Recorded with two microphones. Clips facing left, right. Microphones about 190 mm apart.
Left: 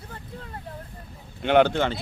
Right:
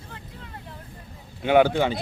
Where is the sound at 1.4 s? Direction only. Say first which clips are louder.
Right 1 dB; 5° right (ahead or behind).